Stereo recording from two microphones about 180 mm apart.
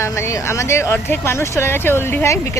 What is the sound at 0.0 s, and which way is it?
Speech, 15° left (ahead or behind).